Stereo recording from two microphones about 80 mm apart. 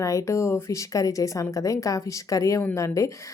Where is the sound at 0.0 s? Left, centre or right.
Left.